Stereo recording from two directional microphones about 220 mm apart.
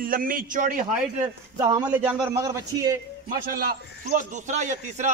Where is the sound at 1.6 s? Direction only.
20° right (ahead or behind).